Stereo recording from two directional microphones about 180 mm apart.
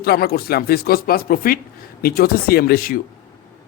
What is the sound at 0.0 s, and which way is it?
Speech, 60° left (ahead or behind).